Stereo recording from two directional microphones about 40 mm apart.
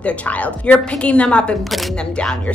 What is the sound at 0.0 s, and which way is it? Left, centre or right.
A woman's voice, left.